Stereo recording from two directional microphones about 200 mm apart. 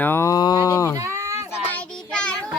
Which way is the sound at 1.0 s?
15° right (ahead or behind).